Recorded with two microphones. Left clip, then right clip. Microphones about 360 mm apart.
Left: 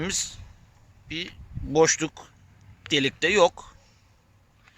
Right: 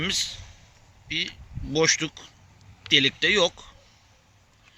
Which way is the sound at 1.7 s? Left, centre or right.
Left.